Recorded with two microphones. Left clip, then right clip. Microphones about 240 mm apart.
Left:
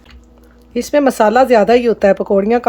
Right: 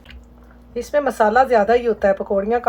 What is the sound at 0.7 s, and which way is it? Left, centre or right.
Speech, left.